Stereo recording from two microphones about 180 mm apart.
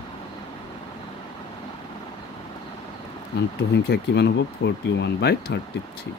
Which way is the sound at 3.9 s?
70° left (ahead or behind).